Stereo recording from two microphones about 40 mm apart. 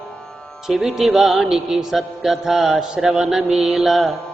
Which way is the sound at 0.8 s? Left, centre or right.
Centre.